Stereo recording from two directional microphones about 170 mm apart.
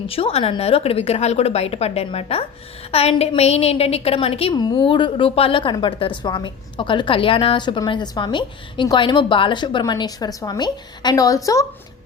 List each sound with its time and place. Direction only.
0.1 s a woman's voice: 35° left (ahead or behind)